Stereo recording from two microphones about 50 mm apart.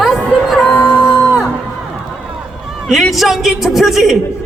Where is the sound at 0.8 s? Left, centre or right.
Left.